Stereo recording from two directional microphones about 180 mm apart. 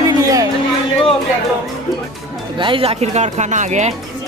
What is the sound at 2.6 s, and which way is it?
Speech, 30° right (ahead or behind).